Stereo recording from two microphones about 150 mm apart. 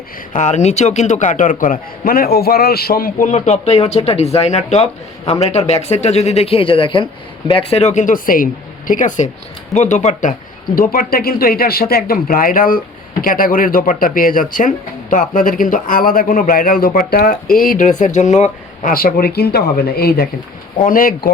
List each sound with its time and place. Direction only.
0.3 s a man's voice: 50° left (ahead or behind)
10.8 s a man's voice: 75° left (ahead or behind)
20.8 s a man's voice: 70° left (ahead or behind)